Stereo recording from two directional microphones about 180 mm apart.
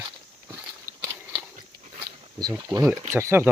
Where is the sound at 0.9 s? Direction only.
50° right (ahead or behind).